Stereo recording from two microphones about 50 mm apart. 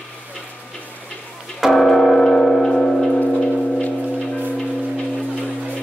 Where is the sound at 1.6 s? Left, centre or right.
Centre.